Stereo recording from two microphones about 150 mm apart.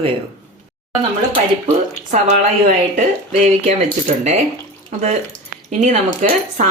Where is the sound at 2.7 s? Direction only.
50° right (ahead or behind).